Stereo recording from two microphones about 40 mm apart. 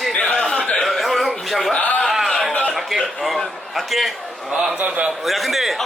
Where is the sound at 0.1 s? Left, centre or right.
Left.